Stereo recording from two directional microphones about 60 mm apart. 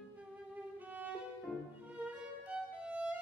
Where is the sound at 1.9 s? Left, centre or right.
Right.